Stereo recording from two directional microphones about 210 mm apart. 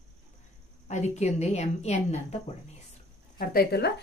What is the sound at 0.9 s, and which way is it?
Speech, 35° left (ahead or behind).